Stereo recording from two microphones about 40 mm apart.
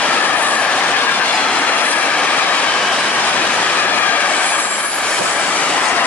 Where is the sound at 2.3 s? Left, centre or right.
Left.